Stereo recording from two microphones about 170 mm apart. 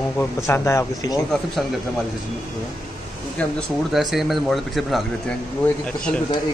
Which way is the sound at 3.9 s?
Centre (ahead or behind).